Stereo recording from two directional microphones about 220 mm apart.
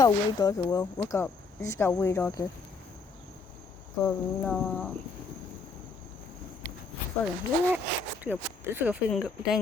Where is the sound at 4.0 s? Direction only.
5° left (ahead or behind).